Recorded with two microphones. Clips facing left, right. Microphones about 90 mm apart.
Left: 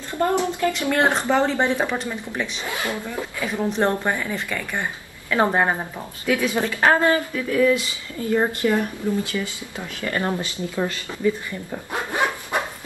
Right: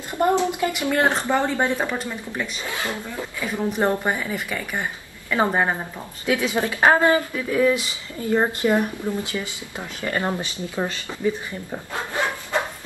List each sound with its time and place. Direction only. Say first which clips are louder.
0.1 s speech: right 1 dB; 20° right (ahead or behind)
1.3 s a woman's voice: left 5 dB; 5° right (ahead or behind)
1.7 s speech: left 2 dB; 10° left (ahead or behind)
2.0 s a woman's voice: left 1 dB; 5° right (ahead or behind)
2.7 s speech: left 2 dB; 15° left (ahead or behind)
3.8 s speech: even; 15° right (ahead or behind)
5.3 s a woman's voice: left 1 dB; centre (ahead or behind)
6.2 s speech: even; 20° right (ahead or behind)
11.9 s speech: left 3 dB; 20° left (ahead or behind)